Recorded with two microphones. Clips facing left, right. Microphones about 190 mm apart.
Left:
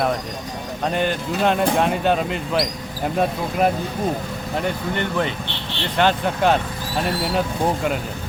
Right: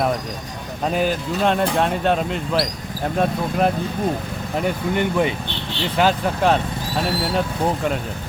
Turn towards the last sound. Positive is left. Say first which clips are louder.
# even
turn(degrees=5)  # may be behind; listen again after turning